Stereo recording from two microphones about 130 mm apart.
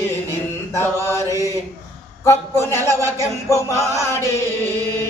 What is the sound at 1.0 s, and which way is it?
Mantra, 20° left (ahead or behind).